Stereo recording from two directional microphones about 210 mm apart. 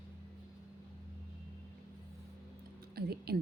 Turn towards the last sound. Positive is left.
turn(degrees=-50)  # may be behind; listen again after turning